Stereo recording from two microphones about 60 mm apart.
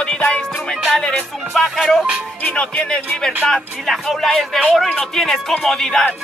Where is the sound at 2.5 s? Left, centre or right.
Centre.